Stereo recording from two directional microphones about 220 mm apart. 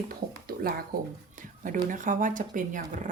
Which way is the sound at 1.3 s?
35° right (ahead or behind).